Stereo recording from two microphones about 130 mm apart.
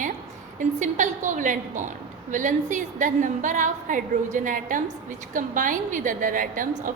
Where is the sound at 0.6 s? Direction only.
70° right (ahead or behind).